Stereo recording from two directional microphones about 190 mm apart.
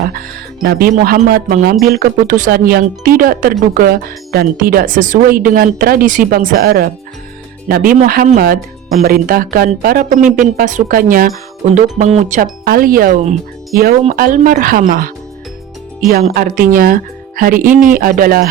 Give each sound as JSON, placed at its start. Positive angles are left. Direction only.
{"t": 0.0, "sound": "speech", "side_deg": -50}
{"t": 12.6, "sound": "speech", "side_deg": -50}
{"t": 16.3, "sound": "speech", "side_deg": -50}